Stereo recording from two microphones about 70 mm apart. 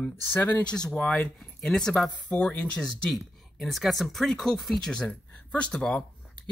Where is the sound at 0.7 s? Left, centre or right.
Centre.